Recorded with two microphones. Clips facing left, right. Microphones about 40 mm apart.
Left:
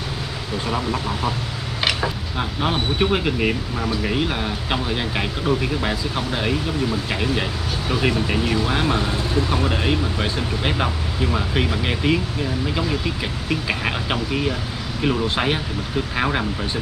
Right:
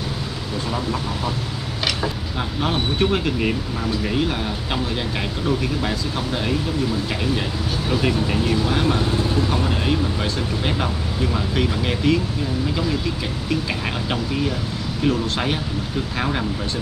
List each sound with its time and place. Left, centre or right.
1.9 s speech: centre
7.9 s speech: centre
13.5 s speech: centre